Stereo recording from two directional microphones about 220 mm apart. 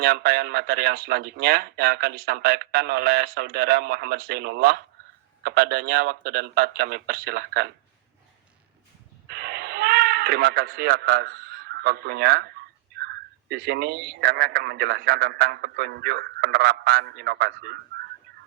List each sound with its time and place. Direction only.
0.0 s a man's voice: 45° right (ahead or behind)
9.2 s a sound: 45° right (ahead or behind)
13.0 s a man's voice: 45° right (ahead or behind)